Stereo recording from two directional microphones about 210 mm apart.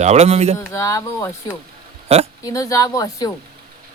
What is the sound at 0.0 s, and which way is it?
Speech, 30° right (ahead or behind).